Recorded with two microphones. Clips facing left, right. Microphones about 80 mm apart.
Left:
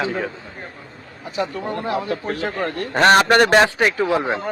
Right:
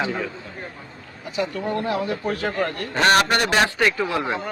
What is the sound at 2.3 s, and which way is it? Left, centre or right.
Speech, left.